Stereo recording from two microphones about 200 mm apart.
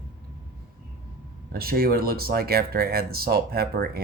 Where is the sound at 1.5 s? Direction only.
50° right (ahead or behind).